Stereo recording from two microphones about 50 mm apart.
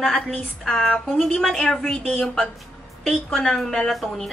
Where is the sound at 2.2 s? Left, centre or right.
Centre.